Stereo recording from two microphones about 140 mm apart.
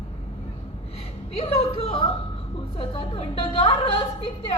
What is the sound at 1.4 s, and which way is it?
A woman's voice, 45° left (ahead or behind).